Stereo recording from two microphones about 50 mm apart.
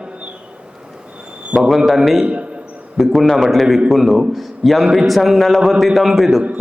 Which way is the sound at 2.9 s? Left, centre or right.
Centre.